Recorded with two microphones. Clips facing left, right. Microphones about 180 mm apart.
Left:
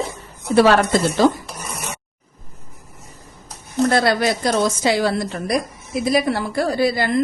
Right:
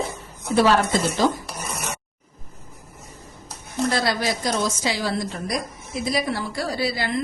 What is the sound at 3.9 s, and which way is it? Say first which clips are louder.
A woman's voice: left 5 dB; 55° left (ahead or behind).